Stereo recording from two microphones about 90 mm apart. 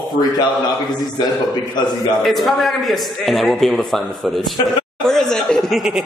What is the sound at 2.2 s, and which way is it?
A man's voice, centre (ahead or behind).